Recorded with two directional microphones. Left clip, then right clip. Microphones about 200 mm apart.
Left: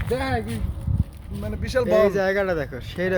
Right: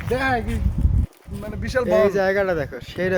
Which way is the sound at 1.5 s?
40° left (ahead or behind).